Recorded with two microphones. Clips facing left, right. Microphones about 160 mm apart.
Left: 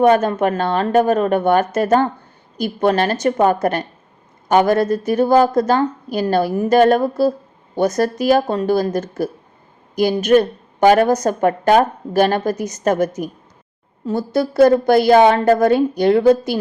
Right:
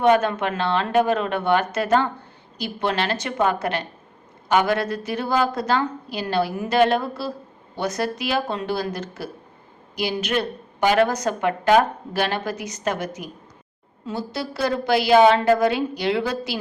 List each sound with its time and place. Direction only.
0.0 s a woman's voice: 45° left (ahead or behind)